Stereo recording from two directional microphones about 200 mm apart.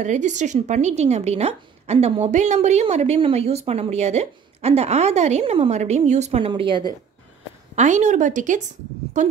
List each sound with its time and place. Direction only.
0.0 s speech: 35° right (ahead or behind)
7.7 s speech: 35° right (ahead or behind)